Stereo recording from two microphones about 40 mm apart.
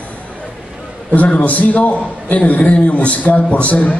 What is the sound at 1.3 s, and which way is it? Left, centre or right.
A man's voice, left.